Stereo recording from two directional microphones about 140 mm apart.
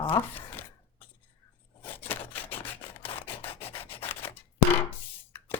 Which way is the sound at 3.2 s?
40° left (ahead or behind).